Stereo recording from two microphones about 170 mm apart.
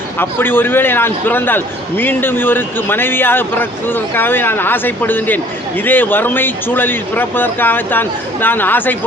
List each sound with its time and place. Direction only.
0.2 s a man's voice: 10° left (ahead or behind)